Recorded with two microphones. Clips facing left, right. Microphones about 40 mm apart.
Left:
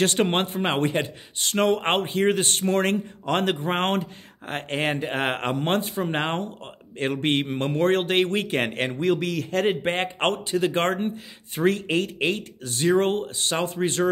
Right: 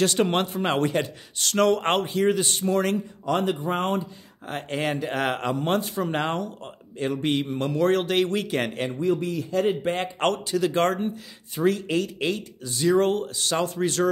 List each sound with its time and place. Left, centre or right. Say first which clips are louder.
0.0 s a man's voice: even; left
2.0 s a man's voice: even; left
4.5 s a man's voice: left 1 dB; left
5.5 s a man's voice: even; left
5.8 s a man's voice: even; left
9.0 s a man's voice: left 1 dB; left
10.1 s a man's voice: even; left